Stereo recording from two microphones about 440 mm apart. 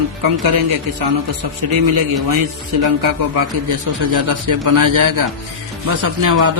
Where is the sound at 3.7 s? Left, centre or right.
Right.